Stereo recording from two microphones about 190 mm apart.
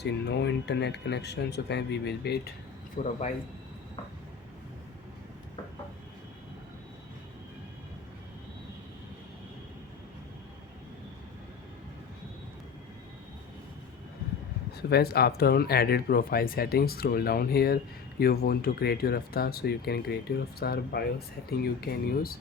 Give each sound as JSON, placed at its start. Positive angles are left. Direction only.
{"t": 0.0, "sound": "speech", "side_deg": 60}
{"t": 2.9, "sound": "speech", "side_deg": 40}
{"t": 14.8, "sound": "speech", "side_deg": 55}